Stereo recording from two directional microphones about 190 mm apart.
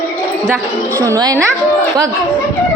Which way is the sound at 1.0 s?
20° right (ahead or behind).